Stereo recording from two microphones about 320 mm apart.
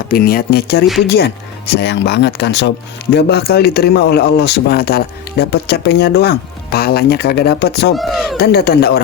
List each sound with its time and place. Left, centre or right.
0.1 s speech: left
7.9 s a sound: centre
8.4 s speech: left